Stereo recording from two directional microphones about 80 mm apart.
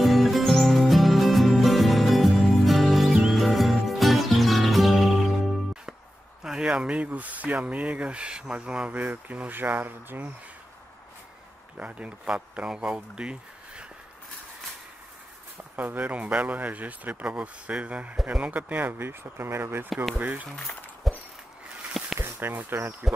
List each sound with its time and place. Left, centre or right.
0.0 s music: centre
6.4 s speech: centre; by 10.3 s right
11.7 s speech: centre
15.7 s speech: right
21.0 s a sound: centre
22.2 s speech: right
23.0 s speech: centre